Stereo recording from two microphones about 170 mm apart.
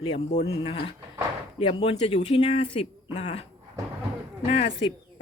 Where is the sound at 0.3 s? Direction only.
45° left (ahead or behind).